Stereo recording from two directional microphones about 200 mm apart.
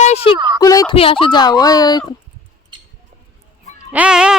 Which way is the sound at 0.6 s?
20° left (ahead or behind).